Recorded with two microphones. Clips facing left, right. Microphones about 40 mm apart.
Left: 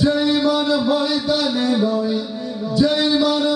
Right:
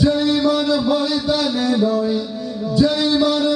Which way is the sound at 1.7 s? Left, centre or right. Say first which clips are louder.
Right 1 dB; centre.